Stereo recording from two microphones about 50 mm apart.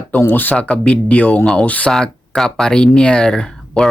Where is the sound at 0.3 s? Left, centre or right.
Left.